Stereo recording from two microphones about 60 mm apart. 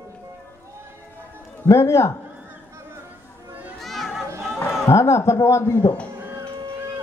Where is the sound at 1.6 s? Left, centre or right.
Left.